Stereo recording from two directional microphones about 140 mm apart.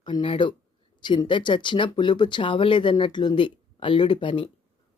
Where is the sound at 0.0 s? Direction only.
35° left (ahead or behind).